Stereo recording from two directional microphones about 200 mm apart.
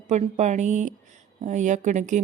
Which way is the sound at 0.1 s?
35° right (ahead or behind).